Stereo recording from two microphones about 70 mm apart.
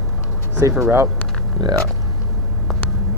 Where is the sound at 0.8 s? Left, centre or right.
Right.